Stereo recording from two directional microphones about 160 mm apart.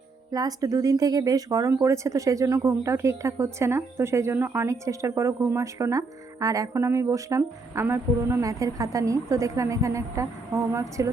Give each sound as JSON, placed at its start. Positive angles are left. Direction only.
{"t": 0.3, "sound": "speech", "side_deg": -20}